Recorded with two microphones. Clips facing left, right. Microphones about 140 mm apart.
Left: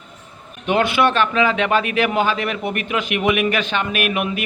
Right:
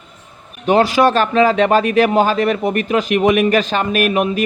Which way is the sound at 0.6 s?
40° right (ahead or behind).